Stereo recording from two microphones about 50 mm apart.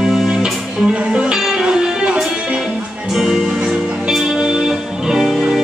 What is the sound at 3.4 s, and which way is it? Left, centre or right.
Music, centre.